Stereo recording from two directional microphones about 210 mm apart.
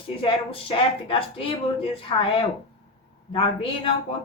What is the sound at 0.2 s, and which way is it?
Speech, 25° left (ahead or behind).